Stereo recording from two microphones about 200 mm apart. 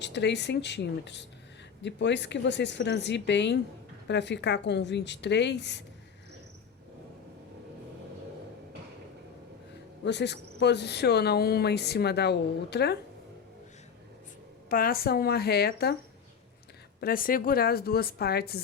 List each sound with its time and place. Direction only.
0.0 s speech: 60° left (ahead or behind)
10.0 s speech: 60° left (ahead or behind)
14.7 s a woman's voice: 45° left (ahead or behind)
17.0 s a woman's voice: 45° left (ahead or behind)